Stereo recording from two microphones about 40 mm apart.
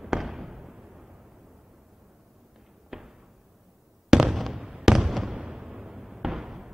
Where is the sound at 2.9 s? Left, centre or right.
Centre.